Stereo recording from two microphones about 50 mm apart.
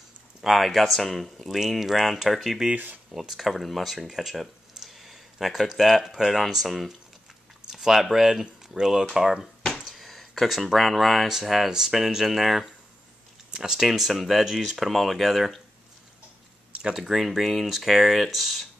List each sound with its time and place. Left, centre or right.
0.4 s speech: centre
2.7 s speech: right
3.1 s speech: centre
16.9 s speech: centre